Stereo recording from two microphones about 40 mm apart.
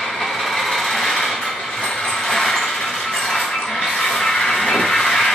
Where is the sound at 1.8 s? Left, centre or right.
Centre.